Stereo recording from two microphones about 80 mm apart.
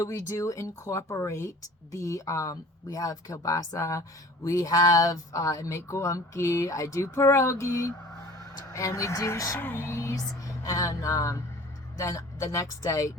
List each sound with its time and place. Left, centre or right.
0.0 s speech: left